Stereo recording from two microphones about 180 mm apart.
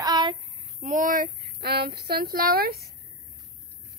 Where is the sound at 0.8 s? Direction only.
45° right (ahead or behind).